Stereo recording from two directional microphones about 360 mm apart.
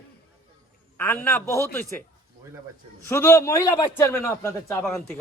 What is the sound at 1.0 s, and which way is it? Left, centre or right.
A man's voice, centre.